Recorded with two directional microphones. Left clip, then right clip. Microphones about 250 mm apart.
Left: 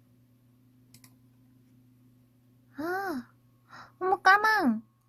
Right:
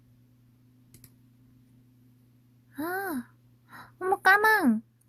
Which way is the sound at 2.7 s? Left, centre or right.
Centre.